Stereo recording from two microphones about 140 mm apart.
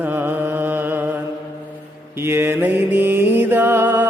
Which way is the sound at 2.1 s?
15° right (ahead or behind).